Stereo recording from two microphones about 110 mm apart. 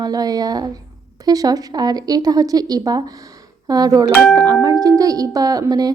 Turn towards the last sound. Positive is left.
turn(degrees=-35)  # may be behind; listen again after turning